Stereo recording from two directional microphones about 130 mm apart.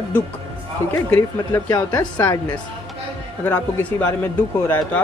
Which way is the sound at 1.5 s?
25° left (ahead or behind).